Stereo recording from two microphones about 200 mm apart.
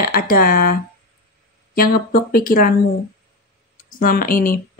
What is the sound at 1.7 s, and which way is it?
Speech, 45° left (ahead or behind).